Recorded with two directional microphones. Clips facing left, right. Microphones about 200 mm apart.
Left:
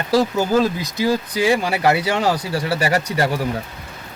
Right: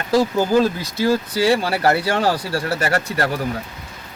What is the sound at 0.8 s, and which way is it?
Speech, 15° left (ahead or behind).